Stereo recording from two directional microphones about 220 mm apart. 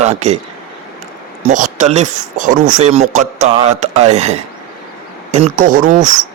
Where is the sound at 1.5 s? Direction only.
35° right (ahead or behind).